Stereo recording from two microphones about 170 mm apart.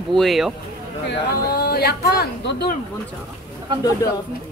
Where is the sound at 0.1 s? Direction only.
Centre (ahead or behind).